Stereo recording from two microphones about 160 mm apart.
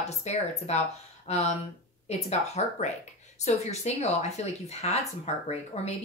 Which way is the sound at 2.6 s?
40° left (ahead or behind).